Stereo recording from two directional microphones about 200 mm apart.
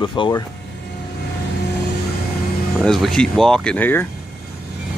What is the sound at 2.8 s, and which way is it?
Speech, centre (ahead or behind).